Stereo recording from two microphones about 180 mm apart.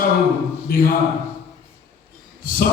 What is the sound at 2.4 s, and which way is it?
Speech, 50° left (ahead or behind).